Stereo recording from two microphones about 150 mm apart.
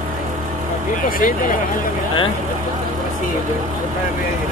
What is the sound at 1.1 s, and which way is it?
Speech, 65° left (ahead or behind).